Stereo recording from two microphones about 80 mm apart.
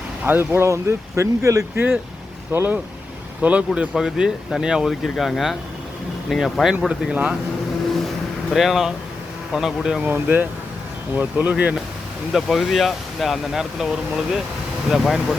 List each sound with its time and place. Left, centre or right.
0.3 s speech: right
1.7 s speech: right
3.9 s speech: centre
8.5 s speech: centre
10.1 s speech: right
12.3 s speech: centre